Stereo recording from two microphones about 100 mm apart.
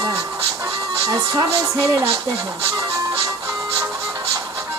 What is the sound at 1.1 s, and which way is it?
Speech, 35° right (ahead or behind).